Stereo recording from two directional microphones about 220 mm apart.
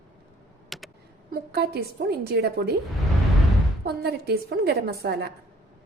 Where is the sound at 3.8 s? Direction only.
45° right (ahead or behind).